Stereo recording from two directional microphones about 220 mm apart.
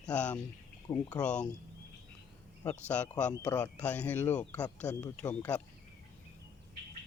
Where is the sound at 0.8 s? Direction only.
15° left (ahead or behind).